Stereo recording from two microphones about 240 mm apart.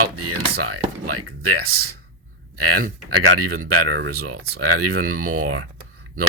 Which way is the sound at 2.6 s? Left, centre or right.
Right.